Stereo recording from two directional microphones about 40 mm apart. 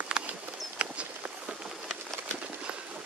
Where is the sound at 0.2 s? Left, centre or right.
Right.